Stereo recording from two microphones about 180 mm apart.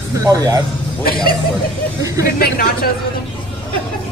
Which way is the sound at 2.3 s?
55° left (ahead or behind).